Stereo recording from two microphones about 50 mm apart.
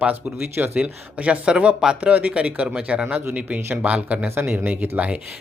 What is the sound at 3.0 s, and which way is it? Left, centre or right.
Speech, right.